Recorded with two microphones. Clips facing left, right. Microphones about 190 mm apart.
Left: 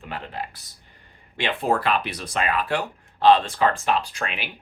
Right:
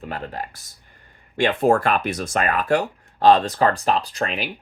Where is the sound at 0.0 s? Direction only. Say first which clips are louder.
Right 3 dB; 40° right (ahead or behind).